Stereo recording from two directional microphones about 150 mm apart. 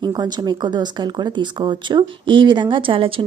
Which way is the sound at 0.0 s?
30° right (ahead or behind).